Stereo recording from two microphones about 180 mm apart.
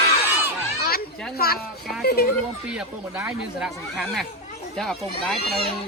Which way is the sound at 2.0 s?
60° left (ahead or behind).